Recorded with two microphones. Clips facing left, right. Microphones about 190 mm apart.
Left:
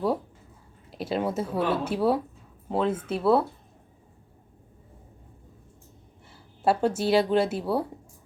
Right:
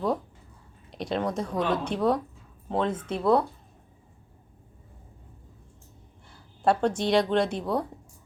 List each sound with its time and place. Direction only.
0.9 s speech: 5° left (ahead or behind)
6.6 s speech: 5° left (ahead or behind)